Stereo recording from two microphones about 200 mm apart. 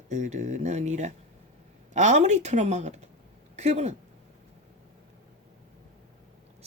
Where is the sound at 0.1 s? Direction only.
35° right (ahead or behind).